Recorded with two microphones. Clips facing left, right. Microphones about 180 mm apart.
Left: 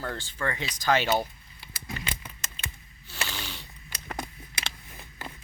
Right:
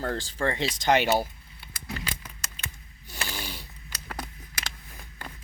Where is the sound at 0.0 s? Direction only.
40° right (ahead or behind); by 1.1 s 20° right (ahead or behind).